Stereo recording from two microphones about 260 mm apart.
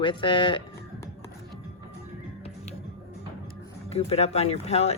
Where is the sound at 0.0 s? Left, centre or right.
Centre.